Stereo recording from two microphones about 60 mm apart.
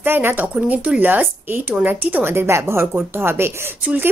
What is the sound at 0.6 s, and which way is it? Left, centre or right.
Speech, right.